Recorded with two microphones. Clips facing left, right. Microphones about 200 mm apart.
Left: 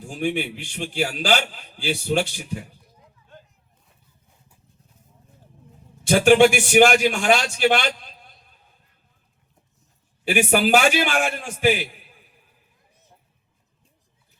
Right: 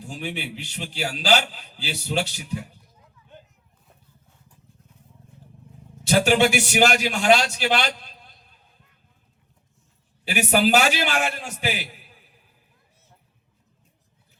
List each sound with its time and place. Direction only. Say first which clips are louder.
0.1 s a man's voice: left 7 dB; 50° left (ahead or behind)
5.3 s vehicle: right 3 dB; 40° left (ahead or behind)
6.1 s a man's voice: left 4 dB; 50° left (ahead or behind)
10.2 s a man's voice: left 1 dB; 50° left (ahead or behind)